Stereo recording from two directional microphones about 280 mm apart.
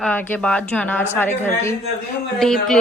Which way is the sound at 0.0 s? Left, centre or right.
Centre.